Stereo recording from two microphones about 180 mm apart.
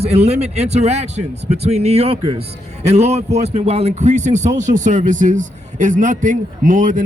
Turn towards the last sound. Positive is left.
turn(degrees=-45)  # may be behind; listen again after turning